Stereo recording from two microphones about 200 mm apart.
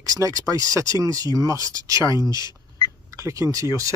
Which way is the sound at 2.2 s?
20° left (ahead or behind).